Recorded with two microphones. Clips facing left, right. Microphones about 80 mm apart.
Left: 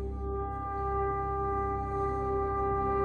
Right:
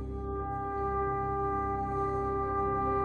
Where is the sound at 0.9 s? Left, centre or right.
Centre.